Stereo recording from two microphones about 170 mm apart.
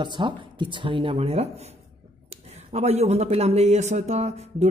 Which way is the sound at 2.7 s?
40° right (ahead or behind).